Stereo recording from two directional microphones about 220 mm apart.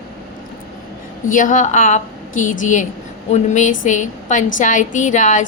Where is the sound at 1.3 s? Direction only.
35° left (ahead or behind).